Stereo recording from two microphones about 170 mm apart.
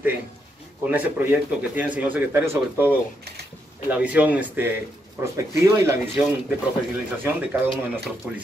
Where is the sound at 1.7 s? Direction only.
10° right (ahead or behind).